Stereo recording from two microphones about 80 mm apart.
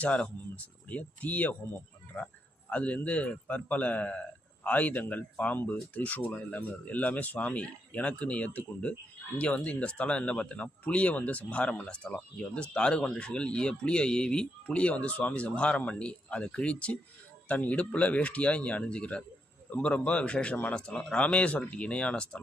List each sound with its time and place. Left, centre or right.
0.0 s a man's voice: centre
9.3 s speech: left
9.6 s a man's voice: centre